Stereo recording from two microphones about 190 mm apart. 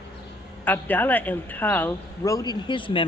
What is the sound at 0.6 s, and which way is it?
Speech, 10° left (ahead or behind).